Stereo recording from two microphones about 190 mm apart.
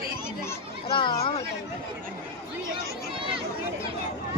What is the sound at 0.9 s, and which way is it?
Speech, 25° left (ahead or behind).